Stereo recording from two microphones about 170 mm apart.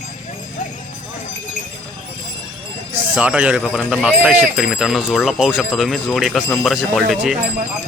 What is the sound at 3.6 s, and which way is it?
A man's voice, 5° left (ahead or behind).